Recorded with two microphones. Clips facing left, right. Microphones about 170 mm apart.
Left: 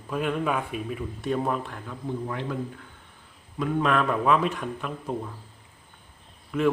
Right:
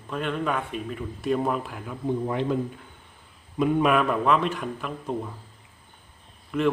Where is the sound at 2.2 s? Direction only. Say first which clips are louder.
Right 6 dB; 20° right (ahead or behind).